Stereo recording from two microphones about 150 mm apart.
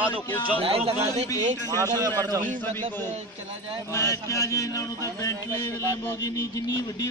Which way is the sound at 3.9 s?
20° left (ahead or behind).